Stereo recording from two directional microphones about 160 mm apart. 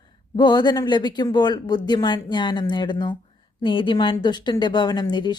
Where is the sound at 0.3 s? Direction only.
25° left (ahead or behind).